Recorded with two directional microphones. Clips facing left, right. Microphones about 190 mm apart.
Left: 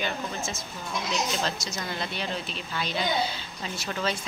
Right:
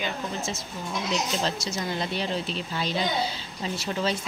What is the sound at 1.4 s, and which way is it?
A child's voice, 30° right (ahead or behind).